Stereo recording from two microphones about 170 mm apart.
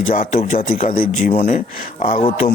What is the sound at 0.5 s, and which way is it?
Speech, 35° left (ahead or behind).